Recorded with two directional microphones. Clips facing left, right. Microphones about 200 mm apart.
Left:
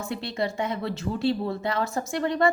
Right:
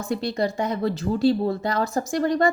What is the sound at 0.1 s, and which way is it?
Speech, 40° right (ahead or behind).